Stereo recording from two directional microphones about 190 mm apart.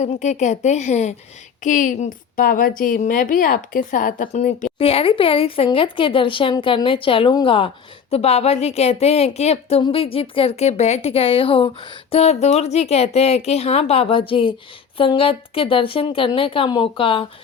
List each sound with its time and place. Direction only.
0.0 s a woman's voice: 40° left (ahead or behind)